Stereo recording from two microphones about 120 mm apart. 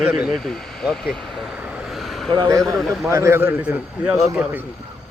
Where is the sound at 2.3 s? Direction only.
30° right (ahead or behind).